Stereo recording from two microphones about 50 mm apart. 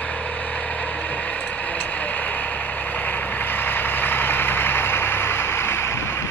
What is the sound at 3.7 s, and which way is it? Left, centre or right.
Vehicle, left.